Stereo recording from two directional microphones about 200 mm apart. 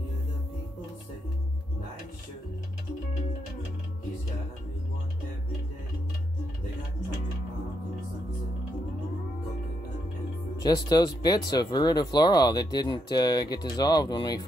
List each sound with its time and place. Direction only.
10.6 s speech: 20° left (ahead or behind)